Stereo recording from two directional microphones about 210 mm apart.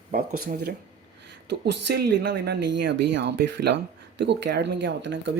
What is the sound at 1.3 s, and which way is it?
Speech, 55° right (ahead or behind).